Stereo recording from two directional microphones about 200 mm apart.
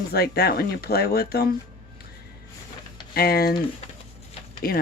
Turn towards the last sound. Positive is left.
turn(degrees=50)  # may be behind; listen again after turning